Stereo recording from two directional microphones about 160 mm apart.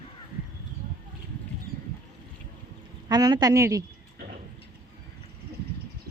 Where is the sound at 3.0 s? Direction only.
25° right (ahead or behind).